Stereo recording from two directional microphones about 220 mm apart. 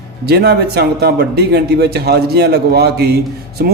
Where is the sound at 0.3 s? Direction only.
45° right (ahead or behind).